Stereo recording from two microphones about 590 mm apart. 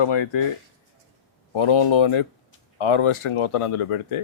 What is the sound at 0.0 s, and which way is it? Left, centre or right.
Speech, left.